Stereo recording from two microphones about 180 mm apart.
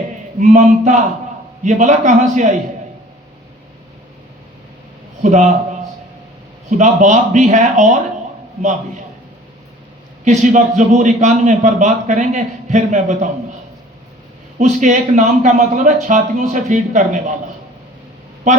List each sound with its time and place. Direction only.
0.3 s a man's voice: 40° right (ahead or behind)
5.2 s a man's voice: 40° right (ahead or behind)
6.7 s a man's voice: 40° right (ahead or behind)
10.2 s a man's voice: 45° right (ahead or behind)
14.6 s a man's voice: 45° right (ahead or behind)
18.5 s a man's voice: 40° right (ahead or behind)